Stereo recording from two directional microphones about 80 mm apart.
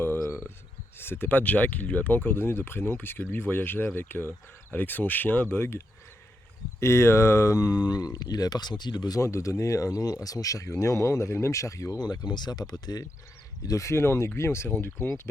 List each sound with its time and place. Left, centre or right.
0.9 s speech: left
9.2 s speech: left
11.9 s speech: left
13.7 s speech: left